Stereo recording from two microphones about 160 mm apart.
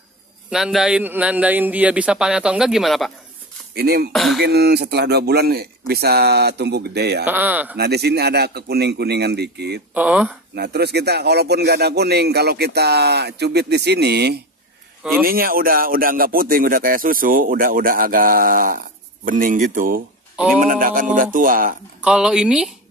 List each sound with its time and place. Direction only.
0.5 s a man's voice: 5° right (ahead or behind)
3.7 s speech: 80° right
4.1 s beatboxing: centre (ahead or behind)
4.4 s speech: 80° right
7.2 s a man's voice: 10° right (ahead or behind)
7.7 s speech: 90° right
9.9 s a man's voice: 10° right (ahead or behind)
10.5 s speech: 90° right
15.2 s speech: 65° right (ahead or behind)
22.0 s speech: 5° right (ahead or behind)